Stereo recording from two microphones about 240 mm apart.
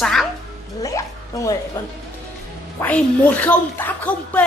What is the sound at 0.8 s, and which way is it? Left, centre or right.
Speech, centre.